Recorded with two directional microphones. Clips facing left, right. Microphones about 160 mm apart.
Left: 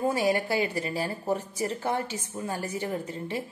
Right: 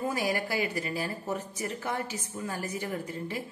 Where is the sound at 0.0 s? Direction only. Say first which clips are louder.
Left 5 dB; 25° left (ahead or behind).